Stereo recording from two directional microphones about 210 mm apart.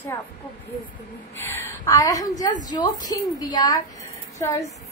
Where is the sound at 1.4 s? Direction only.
10° left (ahead or behind).